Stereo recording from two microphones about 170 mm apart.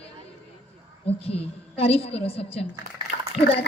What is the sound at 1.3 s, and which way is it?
Speech, 35° left (ahead or behind).